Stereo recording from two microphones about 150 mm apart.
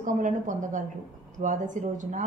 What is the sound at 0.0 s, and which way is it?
A woman's voice, 55° right (ahead or behind).